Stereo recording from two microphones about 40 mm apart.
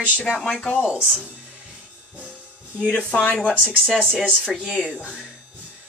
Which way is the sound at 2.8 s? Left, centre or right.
Left.